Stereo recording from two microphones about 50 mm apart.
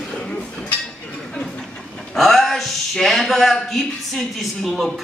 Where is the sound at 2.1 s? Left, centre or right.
Centre.